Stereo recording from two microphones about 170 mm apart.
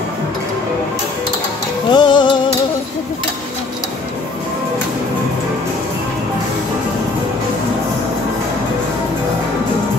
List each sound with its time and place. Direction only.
1.9 s music: 25° left (ahead or behind)